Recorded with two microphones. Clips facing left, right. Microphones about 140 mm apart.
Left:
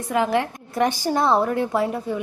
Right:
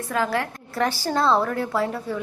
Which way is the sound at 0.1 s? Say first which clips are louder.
Left 4 dB; 20° left (ahead or behind).